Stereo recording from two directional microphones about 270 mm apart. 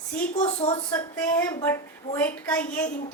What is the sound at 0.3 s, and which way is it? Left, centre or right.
A woman's voice, centre.